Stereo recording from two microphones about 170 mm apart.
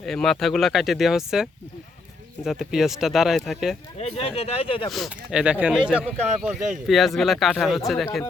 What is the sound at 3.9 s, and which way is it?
Speech, 35° left (ahead or behind).